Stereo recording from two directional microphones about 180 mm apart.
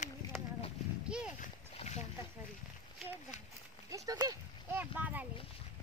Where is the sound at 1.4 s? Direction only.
40° left (ahead or behind).